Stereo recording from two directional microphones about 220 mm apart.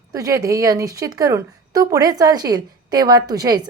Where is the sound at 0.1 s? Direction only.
15° right (ahead or behind).